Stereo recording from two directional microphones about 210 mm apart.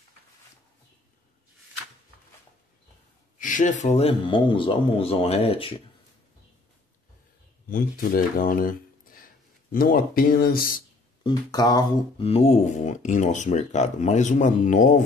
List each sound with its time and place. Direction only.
3.3 s speech: 40° left (ahead or behind)
7.7 s speech: 40° left (ahead or behind)
11.2 s speech: 20° left (ahead or behind); by 15.0 s 35° left (ahead or behind)